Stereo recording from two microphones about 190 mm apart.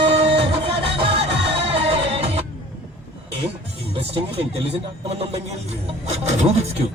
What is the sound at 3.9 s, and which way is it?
Speech, 30° right (ahead or behind).